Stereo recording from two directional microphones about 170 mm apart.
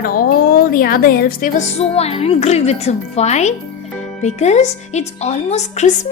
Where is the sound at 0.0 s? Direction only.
60° left (ahead or behind).